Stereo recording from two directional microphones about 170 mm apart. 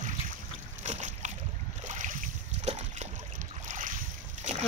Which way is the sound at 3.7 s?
50° right (ahead or behind).